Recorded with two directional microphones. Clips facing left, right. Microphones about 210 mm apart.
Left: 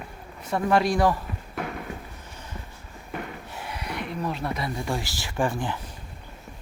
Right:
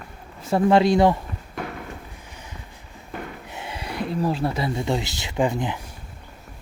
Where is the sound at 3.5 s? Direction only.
20° right (ahead or behind).